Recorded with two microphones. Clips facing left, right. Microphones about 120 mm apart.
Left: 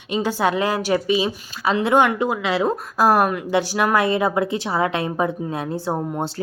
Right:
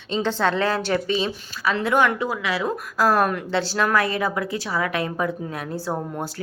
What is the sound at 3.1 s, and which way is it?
A woman's voice, 10° left (ahead or behind).